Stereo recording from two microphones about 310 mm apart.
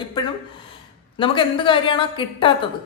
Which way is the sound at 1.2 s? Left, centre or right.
Centre.